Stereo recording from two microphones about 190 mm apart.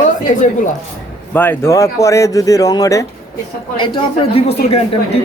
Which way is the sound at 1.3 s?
10° left (ahead or behind).